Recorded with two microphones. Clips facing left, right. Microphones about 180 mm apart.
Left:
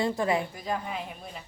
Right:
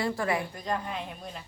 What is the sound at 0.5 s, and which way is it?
Speech, 5° left (ahead or behind).